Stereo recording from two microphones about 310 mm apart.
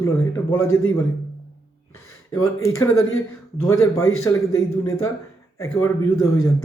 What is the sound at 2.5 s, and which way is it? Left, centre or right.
Speech, centre.